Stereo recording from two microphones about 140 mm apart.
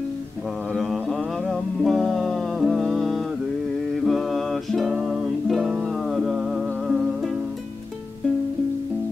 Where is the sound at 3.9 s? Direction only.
Centre (ahead or behind).